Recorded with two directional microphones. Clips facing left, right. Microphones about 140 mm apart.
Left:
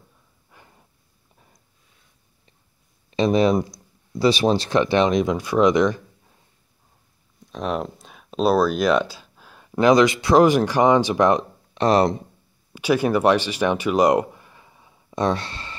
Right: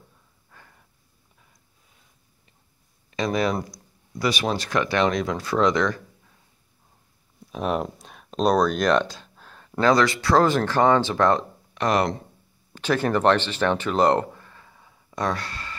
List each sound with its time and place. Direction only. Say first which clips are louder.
0.5 s snort: left 1 dB; 20° left (ahead or behind)
3.1 s speech: left 6 dB; 25° left (ahead or behind)
7.5 s speech: even; centre (ahead or behind); by 11.8 s 15° left (ahead or behind)
11.8 s speech: left 5 dB; 30° left (ahead or behind)
12.7 s speech: left 3 dB; 10° left (ahead or behind)